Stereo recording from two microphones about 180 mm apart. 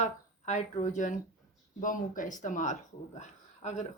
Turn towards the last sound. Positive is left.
turn(degrees=40)  # may be behind; listen again after turning